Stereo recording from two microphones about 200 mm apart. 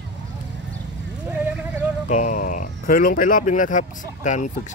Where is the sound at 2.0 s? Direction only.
40° left (ahead or behind).